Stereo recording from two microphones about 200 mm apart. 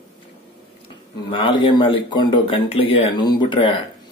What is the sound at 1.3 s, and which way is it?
Speech, 25° left (ahead or behind).